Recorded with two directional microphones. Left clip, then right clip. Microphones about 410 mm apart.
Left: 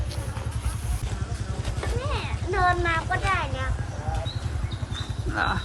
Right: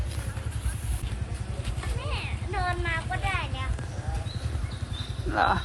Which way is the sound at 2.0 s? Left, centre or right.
Left.